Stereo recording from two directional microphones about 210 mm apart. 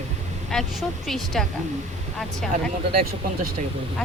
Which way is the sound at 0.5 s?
Centre (ahead or behind).